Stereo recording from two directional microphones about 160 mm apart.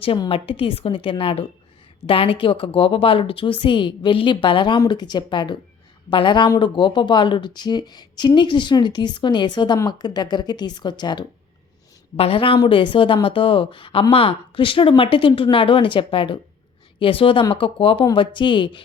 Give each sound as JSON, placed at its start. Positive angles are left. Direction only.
{"t": 0.0, "sound": "speech", "side_deg": 35}